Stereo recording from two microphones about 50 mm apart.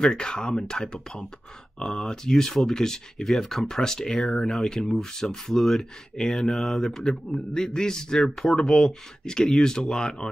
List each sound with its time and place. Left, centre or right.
0.0 s speech: centre